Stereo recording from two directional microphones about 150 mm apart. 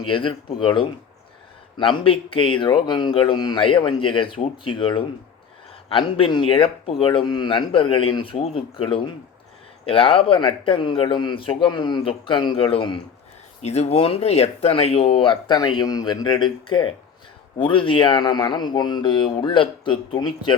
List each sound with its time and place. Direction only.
0.1 s speech: 35° left (ahead or behind)